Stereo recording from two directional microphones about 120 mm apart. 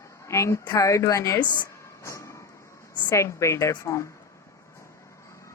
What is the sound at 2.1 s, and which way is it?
Vehicle, 25° left (ahead or behind).